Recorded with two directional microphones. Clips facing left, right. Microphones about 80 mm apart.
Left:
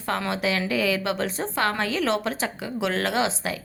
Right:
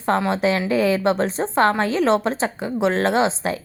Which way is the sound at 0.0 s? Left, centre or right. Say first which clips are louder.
Right 7 dB; right.